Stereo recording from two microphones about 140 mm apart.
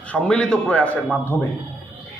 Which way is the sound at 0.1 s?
5° left (ahead or behind).